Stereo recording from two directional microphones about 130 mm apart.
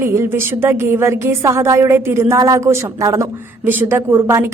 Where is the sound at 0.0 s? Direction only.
20° right (ahead or behind).